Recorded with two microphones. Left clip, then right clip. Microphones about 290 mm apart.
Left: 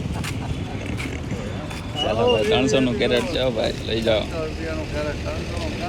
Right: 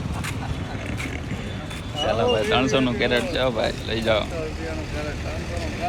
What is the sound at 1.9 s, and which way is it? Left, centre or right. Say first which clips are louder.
Speech: left 2 dB; centre.